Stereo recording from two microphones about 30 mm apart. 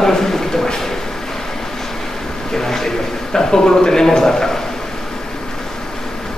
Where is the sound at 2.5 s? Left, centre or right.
Centre.